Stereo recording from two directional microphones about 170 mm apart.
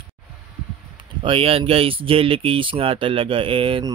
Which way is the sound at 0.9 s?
30° right (ahead or behind).